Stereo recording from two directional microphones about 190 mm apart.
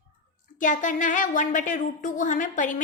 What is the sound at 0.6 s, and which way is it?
A woman's voice, 40° left (ahead or behind).